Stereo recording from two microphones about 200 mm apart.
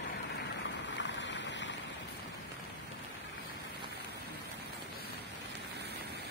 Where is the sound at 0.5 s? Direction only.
65° left (ahead or behind).